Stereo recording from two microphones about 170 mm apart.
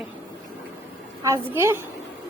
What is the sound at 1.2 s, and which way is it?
Speech, 15° right (ahead or behind).